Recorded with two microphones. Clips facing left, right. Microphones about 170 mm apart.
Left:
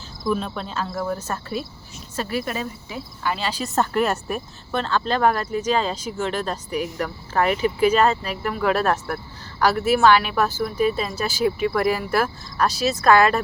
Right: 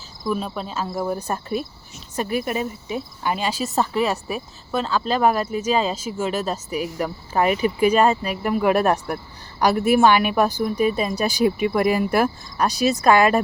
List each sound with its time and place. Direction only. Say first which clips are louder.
0.3 s cricket: left 1 dB; 5° right (ahead or behind)
0.9 s speech: right 4 dB; 15° right (ahead or behind)
3.6 s speech: left 2 dB; centre (ahead or behind); by 13.4 s 15° right (ahead or behind)